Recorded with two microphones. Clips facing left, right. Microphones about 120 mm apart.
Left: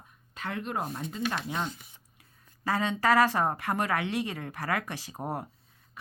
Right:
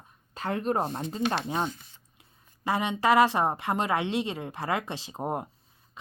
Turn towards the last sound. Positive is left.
turn(degrees=-20)  # may be behind; listen again after turning